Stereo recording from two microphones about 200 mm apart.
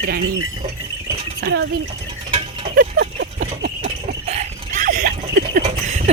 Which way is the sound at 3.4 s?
45° right (ahead or behind).